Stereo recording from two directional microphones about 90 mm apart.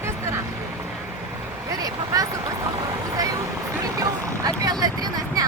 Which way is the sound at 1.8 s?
40° right (ahead or behind).